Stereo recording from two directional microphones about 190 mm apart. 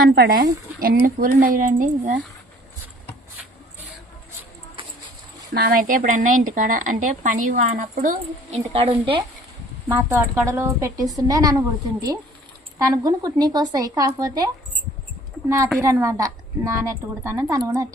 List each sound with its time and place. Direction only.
0.1 s a woman's voice: 55° right (ahead or behind)
5.5 s a woman's voice: 50° right (ahead or behind); by 9.2 s 30° right (ahead or behind)
9.9 s a woman's voice: 15° right (ahead or behind)
12.8 s a woman's voice: 20° right (ahead or behind)